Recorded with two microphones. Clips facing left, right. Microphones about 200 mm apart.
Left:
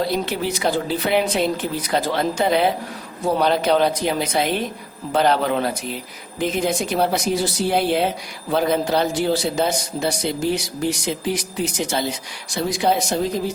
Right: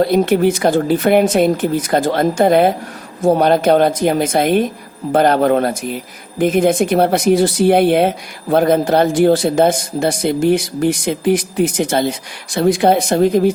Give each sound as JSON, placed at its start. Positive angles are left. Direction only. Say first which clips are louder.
{"t": 0.0, "sound": "speech", "louder": "right 10 dB", "side_deg": -50}